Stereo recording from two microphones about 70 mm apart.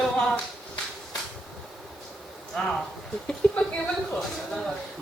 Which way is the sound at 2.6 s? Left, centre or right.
Centre.